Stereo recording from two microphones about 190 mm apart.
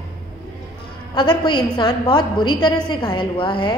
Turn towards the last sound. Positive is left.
turn(degrees=25)  # may be behind; listen again after turning